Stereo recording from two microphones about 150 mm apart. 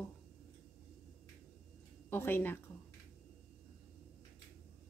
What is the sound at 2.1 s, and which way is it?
Speech, 15° left (ahead or behind).